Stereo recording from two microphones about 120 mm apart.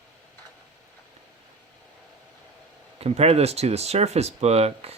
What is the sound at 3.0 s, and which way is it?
Speech, 60° right (ahead or behind).